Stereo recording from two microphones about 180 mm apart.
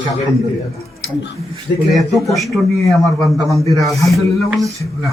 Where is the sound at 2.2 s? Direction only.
Centre (ahead or behind).